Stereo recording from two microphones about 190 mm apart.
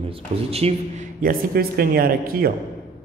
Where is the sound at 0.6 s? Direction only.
30° right (ahead or behind).